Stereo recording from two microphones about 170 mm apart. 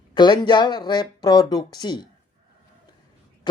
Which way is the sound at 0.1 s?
25° left (ahead or behind).